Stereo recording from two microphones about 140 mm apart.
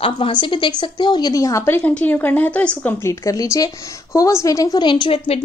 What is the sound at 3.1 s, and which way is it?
A woman's voice, 25° left (ahead or behind).